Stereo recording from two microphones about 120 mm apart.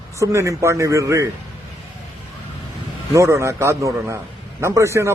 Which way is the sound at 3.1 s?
25° right (ahead or behind).